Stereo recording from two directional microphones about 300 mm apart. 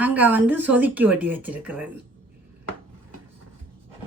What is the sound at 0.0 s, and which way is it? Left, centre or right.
A woman's voice, centre.